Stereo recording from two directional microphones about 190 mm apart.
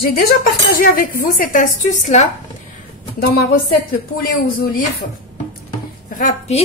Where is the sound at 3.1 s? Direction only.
50° left (ahead or behind).